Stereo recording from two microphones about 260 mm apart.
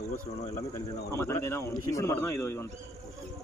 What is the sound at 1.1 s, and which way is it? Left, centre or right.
Speech, centre.